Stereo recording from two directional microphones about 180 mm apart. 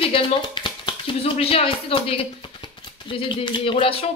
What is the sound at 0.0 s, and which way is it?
A woman's voice, 30° left (ahead or behind).